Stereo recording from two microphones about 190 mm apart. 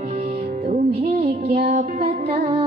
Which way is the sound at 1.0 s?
35° right (ahead or behind).